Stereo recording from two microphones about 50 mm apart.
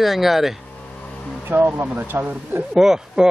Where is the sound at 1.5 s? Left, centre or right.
Right.